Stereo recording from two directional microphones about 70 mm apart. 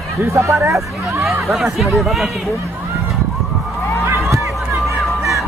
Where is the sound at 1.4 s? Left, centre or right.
Centre.